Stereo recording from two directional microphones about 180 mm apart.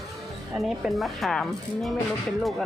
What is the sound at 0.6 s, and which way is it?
Speech, centre (ahead or behind).